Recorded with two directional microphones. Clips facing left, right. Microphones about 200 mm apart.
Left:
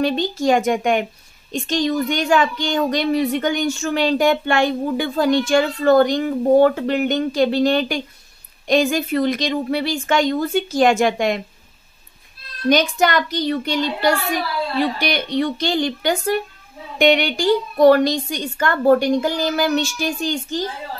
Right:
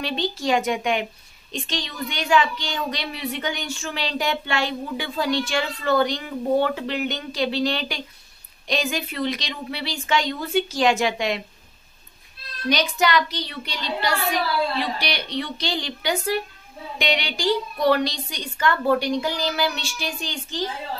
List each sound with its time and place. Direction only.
0.0 s speech: 45° left (ahead or behind)
12.6 s speech: 50° left (ahead or behind)